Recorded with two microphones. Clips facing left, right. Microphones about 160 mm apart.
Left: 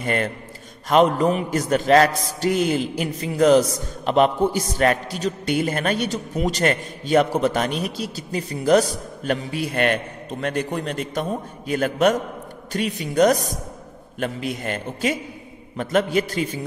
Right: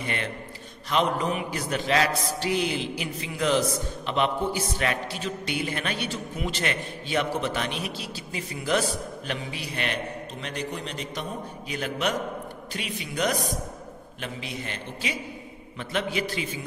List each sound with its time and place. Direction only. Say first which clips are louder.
0.0 s a man's voice: left 8 dB; 45° left (ahead or behind)